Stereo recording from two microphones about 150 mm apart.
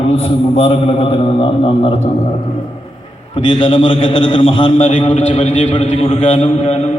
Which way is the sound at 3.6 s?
35° left (ahead or behind).